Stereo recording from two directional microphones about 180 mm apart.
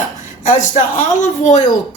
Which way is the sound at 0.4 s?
45° left (ahead or behind).